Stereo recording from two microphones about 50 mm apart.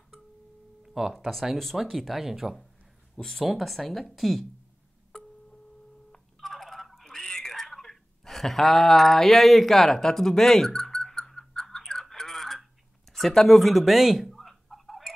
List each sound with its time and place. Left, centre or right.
0.8 s a sound: centre
1.1 s speech: centre
3.2 s speech: centre
5.1 s a sound: centre
6.1 s telephone: centre
13.1 s fowl: centre